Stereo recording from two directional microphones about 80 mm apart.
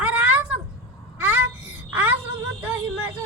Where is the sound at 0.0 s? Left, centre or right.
Centre.